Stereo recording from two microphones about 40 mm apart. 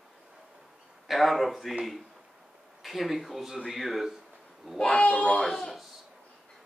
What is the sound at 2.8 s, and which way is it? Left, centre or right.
A man's voice, centre.